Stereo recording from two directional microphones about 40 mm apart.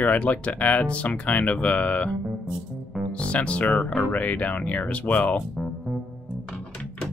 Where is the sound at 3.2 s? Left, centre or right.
Left.